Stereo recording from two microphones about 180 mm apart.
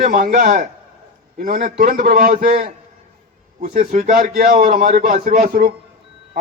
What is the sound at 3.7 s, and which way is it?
A man's voice, 45° right (ahead or behind).